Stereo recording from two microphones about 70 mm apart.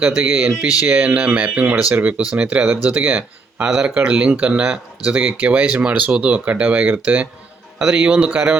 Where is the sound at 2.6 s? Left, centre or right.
Right.